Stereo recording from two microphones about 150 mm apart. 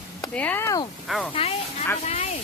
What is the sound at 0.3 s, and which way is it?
Speech, 10° left (ahead or behind).